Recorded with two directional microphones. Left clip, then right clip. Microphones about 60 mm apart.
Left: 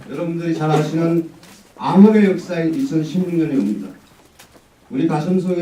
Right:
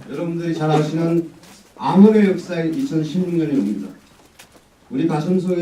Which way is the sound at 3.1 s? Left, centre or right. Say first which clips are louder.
Left 1 dB; centre.